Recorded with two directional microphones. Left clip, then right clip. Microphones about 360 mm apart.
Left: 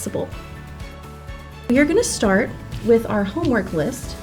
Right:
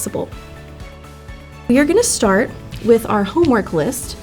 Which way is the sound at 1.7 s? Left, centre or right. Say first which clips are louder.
Right 3 dB; right.